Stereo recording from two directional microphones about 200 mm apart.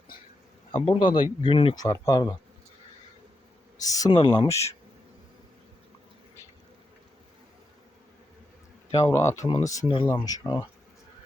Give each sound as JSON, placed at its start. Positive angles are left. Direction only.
{"t": 0.9, "sound": "speech", "side_deg": 25}
{"t": 3.8, "sound": "speech", "side_deg": 15}
{"t": 8.9, "sound": "speech", "side_deg": 15}